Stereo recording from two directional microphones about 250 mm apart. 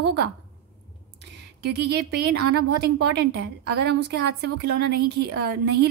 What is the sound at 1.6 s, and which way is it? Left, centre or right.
A woman's voice, right.